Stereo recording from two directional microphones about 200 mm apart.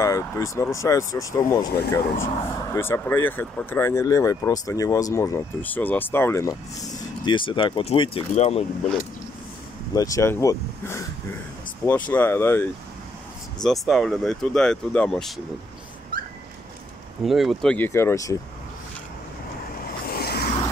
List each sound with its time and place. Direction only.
0.0 s speech: 15° left (ahead or behind)
2.7 s speech: 10° left (ahead or behind)
7.2 s speech: 25° left (ahead or behind)
9.9 s speech: 15° left (ahead or behind)
13.6 s speech: centre (ahead or behind)
17.2 s speech: centre (ahead or behind); by 18.4 s 15° left (ahead or behind)
20.1 s vehicle: 50° left (ahead or behind)